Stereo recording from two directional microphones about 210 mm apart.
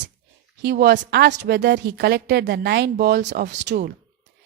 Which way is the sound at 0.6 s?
50° right (ahead or behind).